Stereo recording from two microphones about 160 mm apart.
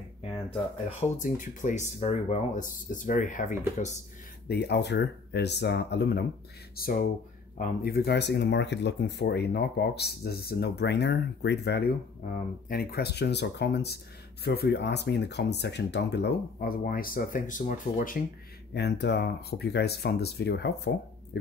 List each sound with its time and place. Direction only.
1.1 s speech: 50° left (ahead or behind)
4.5 s speech: 90° left
6.8 s speech: 70° left (ahead or behind)
18.7 s speech: 90° left